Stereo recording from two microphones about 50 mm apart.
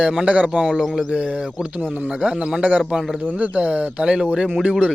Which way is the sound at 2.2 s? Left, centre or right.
Centre.